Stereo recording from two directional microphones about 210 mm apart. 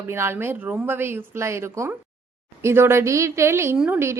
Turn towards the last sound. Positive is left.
turn(degrees=-10)  # may be behind; listen again after turning